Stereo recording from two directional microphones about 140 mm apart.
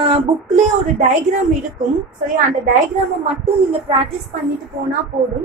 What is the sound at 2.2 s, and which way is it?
Speech, 65° right (ahead or behind).